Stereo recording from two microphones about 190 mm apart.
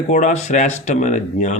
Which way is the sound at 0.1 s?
40° left (ahead or behind).